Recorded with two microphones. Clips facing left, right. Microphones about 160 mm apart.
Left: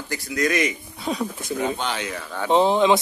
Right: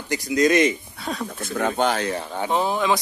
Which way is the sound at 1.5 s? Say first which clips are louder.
Right 4 dB; 55° right (ahead or behind).